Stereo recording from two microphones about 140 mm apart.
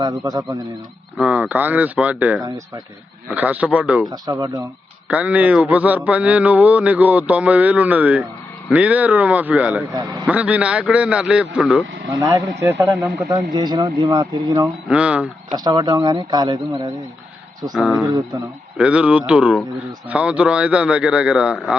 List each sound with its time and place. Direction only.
0.0 s speech: 30° right (ahead or behind)
1.1 s mantra: 10° right (ahead or behind)
4.1 s speech: 25° right (ahead or behind)
5.0 s mantra: 10° right (ahead or behind)
9.9 s speech: 30° right (ahead or behind)
10.2 s mantra: 10° right (ahead or behind)
12.2 s speech: 20° right (ahead or behind)
14.8 s mantra: 10° right (ahead or behind)
15.5 s speech: 30° right (ahead or behind)
17.7 s speech: 5° right (ahead or behind)
18.8 s mantra: 10° right (ahead or behind)